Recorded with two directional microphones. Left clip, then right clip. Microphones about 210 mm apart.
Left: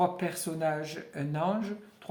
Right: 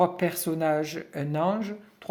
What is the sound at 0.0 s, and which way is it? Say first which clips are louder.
Speech: right 5 dB; 45° right (ahead or behind).